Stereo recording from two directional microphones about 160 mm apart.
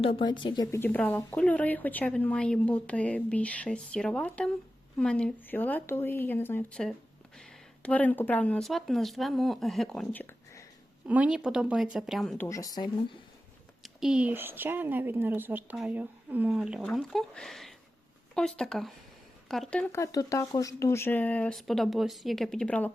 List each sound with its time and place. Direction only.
0.0 s speech: 35° left (ahead or behind); by 10.7 s 15° left (ahead or behind)
11.0 s speech: 10° right (ahead or behind)
12.4 s speech: 20° left (ahead or behind)
13.8 s a woman's voice: 5° right (ahead or behind)
19.9 s speech: 20° left (ahead or behind)